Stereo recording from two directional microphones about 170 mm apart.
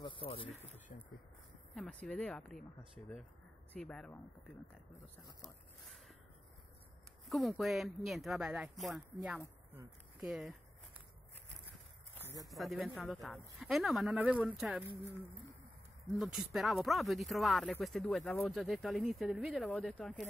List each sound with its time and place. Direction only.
0.0 s a sound: 30° left (ahead or behind)
1.7 s speech: 5° left (ahead or behind)
4.9 s speech: 20° left (ahead or behind)
7.2 s speech: centre (ahead or behind)
12.2 s a sound: 15° right (ahead or behind)
12.4 s speech: centre (ahead or behind)
16.1 s speech: centre (ahead or behind)